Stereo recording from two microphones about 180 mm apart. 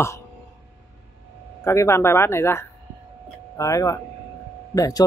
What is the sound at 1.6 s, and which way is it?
Speech, 15° left (ahead or behind).